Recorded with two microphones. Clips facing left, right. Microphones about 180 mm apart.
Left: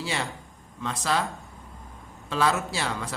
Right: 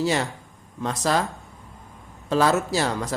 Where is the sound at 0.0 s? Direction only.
40° right (ahead or behind).